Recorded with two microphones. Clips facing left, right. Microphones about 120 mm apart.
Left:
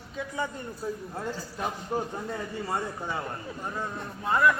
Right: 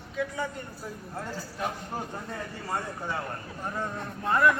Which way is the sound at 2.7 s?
20° left (ahead or behind).